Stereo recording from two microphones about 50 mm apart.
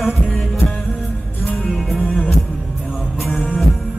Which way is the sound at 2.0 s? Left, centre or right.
Left.